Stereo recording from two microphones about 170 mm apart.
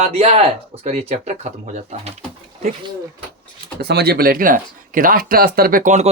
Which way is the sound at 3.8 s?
70° right (ahead or behind).